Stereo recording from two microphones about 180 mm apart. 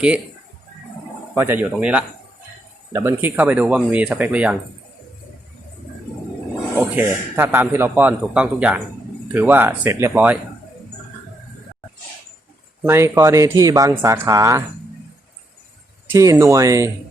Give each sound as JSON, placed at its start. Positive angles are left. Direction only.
{"t": 1.4, "sound": "a man's voice", "side_deg": -10}
{"t": 6.9, "sound": "a man's voice", "side_deg": -10}
{"t": 12.8, "sound": "a man's voice", "side_deg": -15}
{"t": 16.1, "sound": "a man's voice", "side_deg": -15}